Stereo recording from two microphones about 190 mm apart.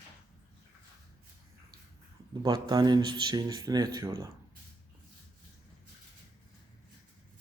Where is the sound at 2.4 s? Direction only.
20° right (ahead or behind).